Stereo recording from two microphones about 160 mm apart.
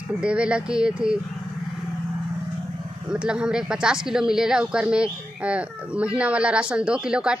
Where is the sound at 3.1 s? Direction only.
5° right (ahead or behind).